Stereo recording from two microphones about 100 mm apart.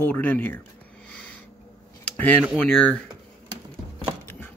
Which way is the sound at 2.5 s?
5° left (ahead or behind).